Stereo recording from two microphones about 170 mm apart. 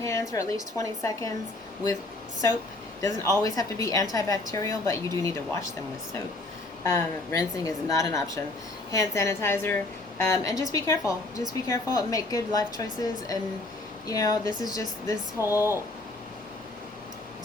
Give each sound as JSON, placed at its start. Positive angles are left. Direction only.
{"t": 0.0, "sound": "a woman's voice", "side_deg": 20}
{"t": 3.0, "sound": "a woman's voice", "side_deg": 20}
{"t": 6.8, "sound": "a woman's voice", "side_deg": 20}